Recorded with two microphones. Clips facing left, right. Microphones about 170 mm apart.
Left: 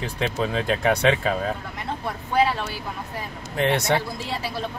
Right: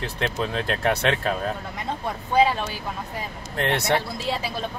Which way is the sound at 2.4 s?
15° right (ahead or behind).